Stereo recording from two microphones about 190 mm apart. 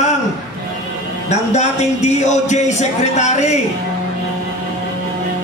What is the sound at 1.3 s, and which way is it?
Speech, 35° left (ahead or behind).